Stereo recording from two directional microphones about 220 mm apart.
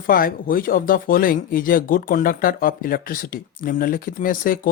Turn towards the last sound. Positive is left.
turn(degrees=40)  # may be behind; listen again after turning